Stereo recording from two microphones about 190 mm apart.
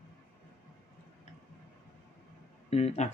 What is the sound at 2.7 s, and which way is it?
Speech, 35° left (ahead or behind).